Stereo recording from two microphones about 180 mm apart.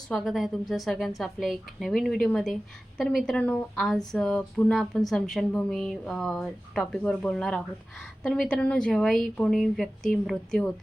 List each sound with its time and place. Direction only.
0.1 s a woman's voice: centre (ahead or behind)